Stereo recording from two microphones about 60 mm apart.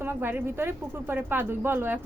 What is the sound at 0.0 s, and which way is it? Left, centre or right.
Speech, right.